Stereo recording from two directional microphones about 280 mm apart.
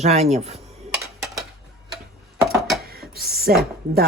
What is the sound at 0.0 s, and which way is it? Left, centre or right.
Speech, right.